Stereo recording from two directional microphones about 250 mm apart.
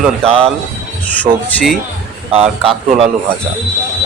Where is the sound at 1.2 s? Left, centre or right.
Centre.